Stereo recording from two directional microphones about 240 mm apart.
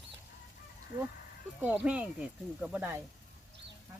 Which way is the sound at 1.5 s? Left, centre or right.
Centre.